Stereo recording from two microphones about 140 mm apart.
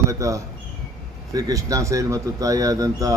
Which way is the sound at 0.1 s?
25° right (ahead or behind).